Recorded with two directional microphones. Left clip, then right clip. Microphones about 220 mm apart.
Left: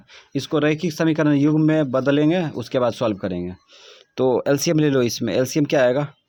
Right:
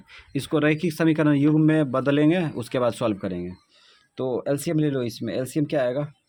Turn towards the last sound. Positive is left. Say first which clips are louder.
# left 6 dB
turn(degrees=30)  # may be behind; listen again after turning